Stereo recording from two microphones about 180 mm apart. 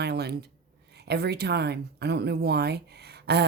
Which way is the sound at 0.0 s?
65° right (ahead or behind).